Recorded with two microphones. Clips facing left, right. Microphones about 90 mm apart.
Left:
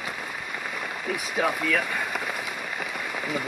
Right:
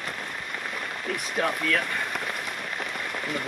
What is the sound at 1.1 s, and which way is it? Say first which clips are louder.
Speech: left 1 dB; 5° left (ahead or behind).